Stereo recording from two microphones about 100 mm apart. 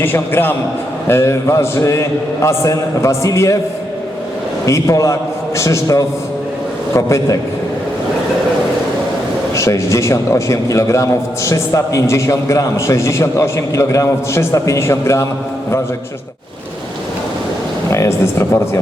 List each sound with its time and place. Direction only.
0.0 s a man's voice: 20° left (ahead or behind)
4.6 s a man's voice: 30° left (ahead or behind)
9.6 s a man's voice: 30° left (ahead or behind)
17.9 s a man's voice: 30° left (ahead or behind)